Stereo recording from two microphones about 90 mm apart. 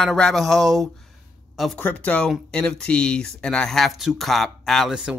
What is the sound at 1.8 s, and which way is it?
Speech, 20° left (ahead or behind).